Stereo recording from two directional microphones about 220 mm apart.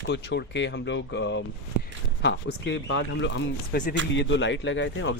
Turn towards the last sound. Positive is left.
turn(degrees=55)  # may be behind; listen again after turning